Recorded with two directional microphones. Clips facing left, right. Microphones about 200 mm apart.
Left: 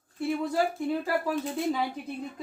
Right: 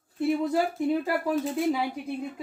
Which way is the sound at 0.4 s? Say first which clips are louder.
Right 2 dB; 20° right (ahead or behind).